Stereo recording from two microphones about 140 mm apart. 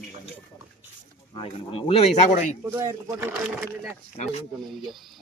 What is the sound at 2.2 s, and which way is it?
Speech, 60° left (ahead or behind).